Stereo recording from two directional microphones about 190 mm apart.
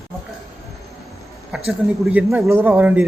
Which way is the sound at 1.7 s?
5° right (ahead or behind).